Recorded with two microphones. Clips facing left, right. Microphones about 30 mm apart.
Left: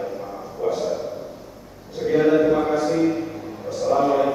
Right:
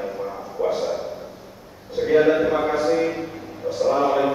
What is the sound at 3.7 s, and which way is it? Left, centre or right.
Chant, centre.